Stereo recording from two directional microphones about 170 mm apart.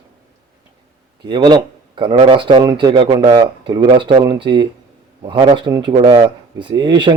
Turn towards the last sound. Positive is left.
turn(degrees=-25)  # may be behind; listen again after turning